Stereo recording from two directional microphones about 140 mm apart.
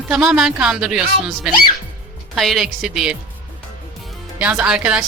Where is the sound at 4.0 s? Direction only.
Centre (ahead or behind).